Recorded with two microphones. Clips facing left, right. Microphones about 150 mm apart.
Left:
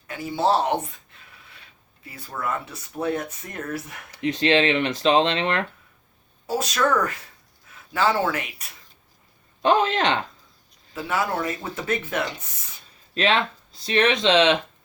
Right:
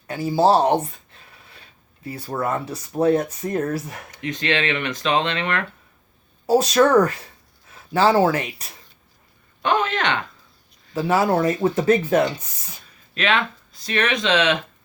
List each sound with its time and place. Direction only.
0.1 s a sound: 35° right (ahead or behind)
2.0 s speech: 35° right (ahead or behind)
4.1 s speech: 30° left (ahead or behind)
6.5 s speech: 35° right (ahead or behind)
9.6 s speech: 30° left (ahead or behind)
10.9 s speech: 35° right (ahead or behind)
13.1 s speech: 30° left (ahead or behind)